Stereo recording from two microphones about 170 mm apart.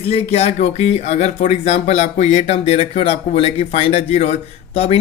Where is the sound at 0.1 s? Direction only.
35° left (ahead or behind).